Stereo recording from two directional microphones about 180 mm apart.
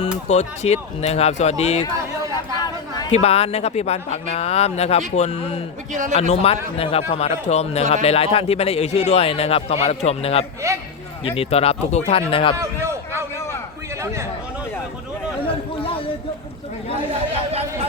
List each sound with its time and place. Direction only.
0.3 s speech: 40° left (ahead or behind)
3.1 s speech: 35° left (ahead or behind)
5.9 s a man's voice: 45° right (ahead or behind)
6.1 s a man's voice: 35° left (ahead or behind)
12.5 s a sound: 15° right (ahead or behind)
15.4 s chatter: 30° left (ahead or behind)